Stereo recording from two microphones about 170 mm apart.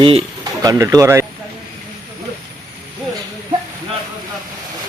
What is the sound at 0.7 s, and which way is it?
Speech, 20° right (ahead or behind).